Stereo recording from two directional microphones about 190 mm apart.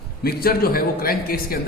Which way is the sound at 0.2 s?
55° left (ahead or behind).